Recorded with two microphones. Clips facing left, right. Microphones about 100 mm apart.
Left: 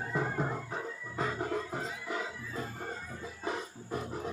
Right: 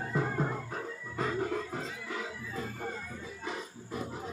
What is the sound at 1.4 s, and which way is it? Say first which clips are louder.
Music: right 1 dB; 15° left (ahead or behind).